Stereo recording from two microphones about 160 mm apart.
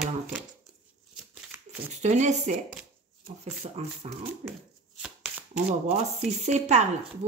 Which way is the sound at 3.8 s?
40° right (ahead or behind).